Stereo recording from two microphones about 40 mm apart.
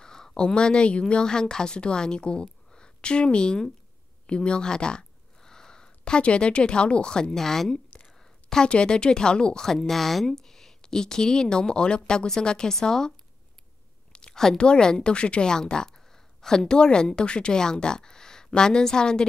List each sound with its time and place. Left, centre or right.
0.0 s speech: centre
1.2 s a woman's voice: centre
7.3 s speech: centre
8.1 s a sound: centre
8.6 s speech: left
14.3 s speech: centre; by 15.5 s left
15.5 s a woman's voice: centre